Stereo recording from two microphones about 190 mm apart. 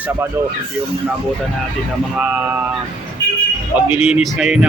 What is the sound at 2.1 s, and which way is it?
Speech, 5° right (ahead or behind).